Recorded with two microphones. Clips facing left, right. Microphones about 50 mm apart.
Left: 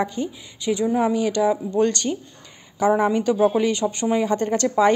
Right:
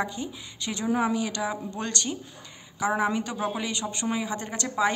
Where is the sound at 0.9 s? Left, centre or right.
Centre.